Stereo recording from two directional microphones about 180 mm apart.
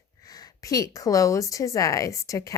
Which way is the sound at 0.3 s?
20° left (ahead or behind).